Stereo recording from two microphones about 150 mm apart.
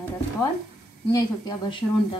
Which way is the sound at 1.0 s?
30° left (ahead or behind).